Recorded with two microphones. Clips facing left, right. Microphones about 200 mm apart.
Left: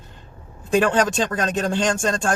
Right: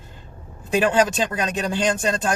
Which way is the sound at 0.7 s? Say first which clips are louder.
Even; 5° right (ahead or behind).